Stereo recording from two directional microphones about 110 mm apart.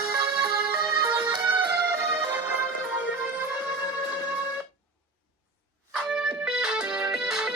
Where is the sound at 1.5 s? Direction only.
25° right (ahead or behind).